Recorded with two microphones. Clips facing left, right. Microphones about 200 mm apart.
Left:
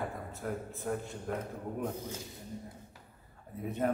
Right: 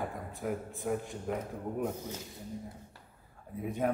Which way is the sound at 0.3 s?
15° right (ahead or behind).